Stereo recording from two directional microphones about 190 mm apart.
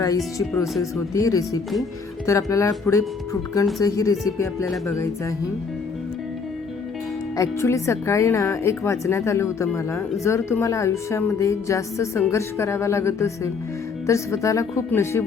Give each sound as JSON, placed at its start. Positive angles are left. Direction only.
{"t": 0.3, "sound": "speech", "side_deg": 15}
{"t": 7.3, "sound": "speech", "side_deg": 15}